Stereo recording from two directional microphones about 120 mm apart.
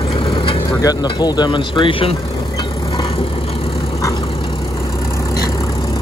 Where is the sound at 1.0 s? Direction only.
35° left (ahead or behind).